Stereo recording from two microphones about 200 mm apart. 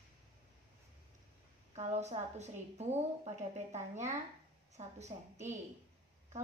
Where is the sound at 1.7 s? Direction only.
35° right (ahead or behind).